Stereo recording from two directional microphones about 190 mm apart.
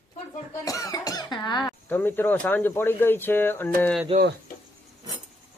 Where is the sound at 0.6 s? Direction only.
20° left (ahead or behind).